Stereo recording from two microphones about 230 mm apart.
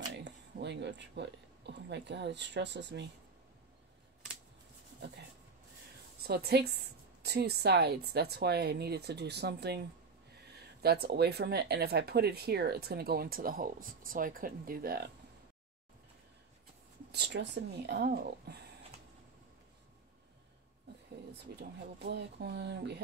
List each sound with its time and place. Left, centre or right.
0.1 s speech: right
6.2 s speech: right
17.1 s speech: right
21.5 s speech: right